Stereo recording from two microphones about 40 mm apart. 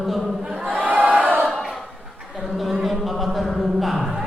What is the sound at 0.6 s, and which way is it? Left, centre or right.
Crowd, right.